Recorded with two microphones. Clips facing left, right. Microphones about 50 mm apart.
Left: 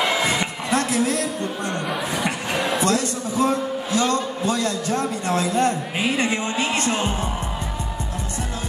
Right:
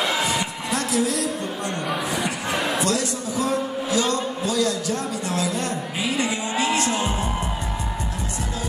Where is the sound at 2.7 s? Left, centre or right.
Left.